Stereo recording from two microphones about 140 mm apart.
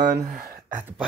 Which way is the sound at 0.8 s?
15° right (ahead or behind).